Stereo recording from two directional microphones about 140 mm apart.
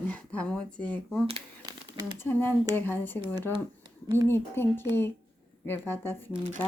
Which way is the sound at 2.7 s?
15° left (ahead or behind).